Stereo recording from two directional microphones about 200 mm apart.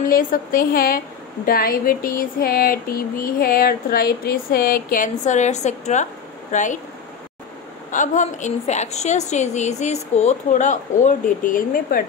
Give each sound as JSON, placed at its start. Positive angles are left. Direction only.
{"t": 0.0, "sound": "a woman's voice", "side_deg": 45}
{"t": 7.9, "sound": "a woman's voice", "side_deg": 40}